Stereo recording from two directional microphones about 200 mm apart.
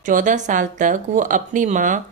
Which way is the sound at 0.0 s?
40° right (ahead or behind).